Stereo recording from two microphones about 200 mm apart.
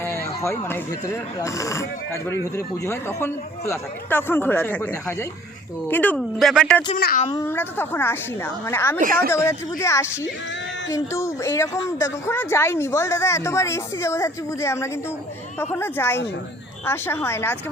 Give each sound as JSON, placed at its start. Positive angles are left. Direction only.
{"t": 0.0, "sound": "speech", "side_deg": 10}
{"t": 6.9, "sound": "a child's voice", "side_deg": 40}
{"t": 7.3, "sound": "speech", "side_deg": 15}